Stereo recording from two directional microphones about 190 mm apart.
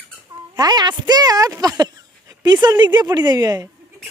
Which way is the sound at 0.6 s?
20° right (ahead or behind).